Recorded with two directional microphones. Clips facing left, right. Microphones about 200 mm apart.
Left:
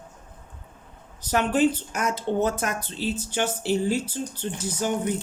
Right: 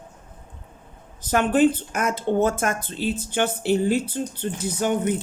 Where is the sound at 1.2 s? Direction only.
50° right (ahead or behind).